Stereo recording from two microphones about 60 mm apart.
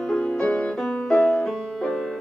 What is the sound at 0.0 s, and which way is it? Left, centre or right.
Music, centre.